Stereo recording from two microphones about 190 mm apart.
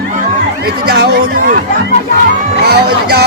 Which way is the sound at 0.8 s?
60° right (ahead or behind).